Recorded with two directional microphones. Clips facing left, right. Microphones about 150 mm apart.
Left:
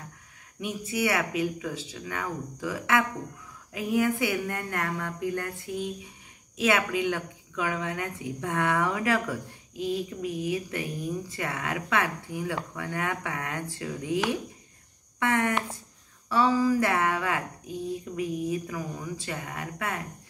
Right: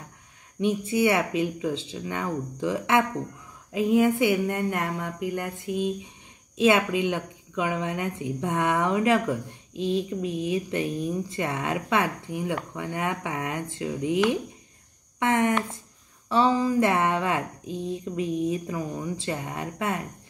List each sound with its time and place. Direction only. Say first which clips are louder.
0.6 s speech: right 6 dB; 25° right (ahead or behind)